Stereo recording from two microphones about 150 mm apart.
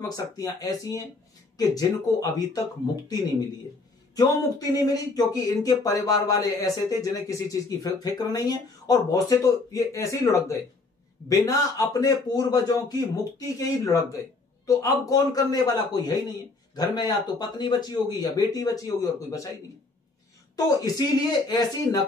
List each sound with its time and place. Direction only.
0.1 s speech: 25° left (ahead or behind)